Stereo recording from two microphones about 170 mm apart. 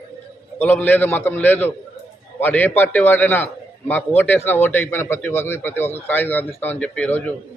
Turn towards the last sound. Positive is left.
turn(degrees=10)  # may be behind; listen again after turning